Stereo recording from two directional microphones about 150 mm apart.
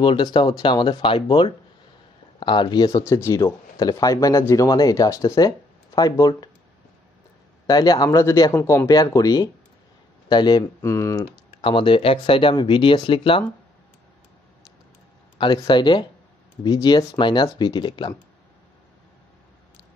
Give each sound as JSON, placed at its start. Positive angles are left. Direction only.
{"t": 0.0, "sound": "speech", "side_deg": 30}
{"t": 7.6, "sound": "speech", "side_deg": 25}
{"t": 11.6, "sound": "speech", "side_deg": 35}
{"t": 15.3, "sound": "speech", "side_deg": 30}